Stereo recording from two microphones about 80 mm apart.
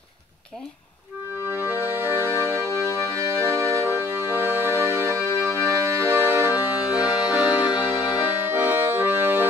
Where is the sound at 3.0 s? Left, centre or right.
Right.